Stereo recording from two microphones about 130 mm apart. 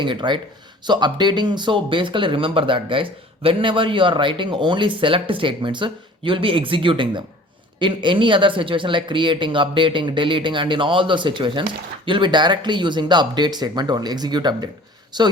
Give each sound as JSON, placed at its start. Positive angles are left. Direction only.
{"t": 0.0, "sound": "speech", "side_deg": -35}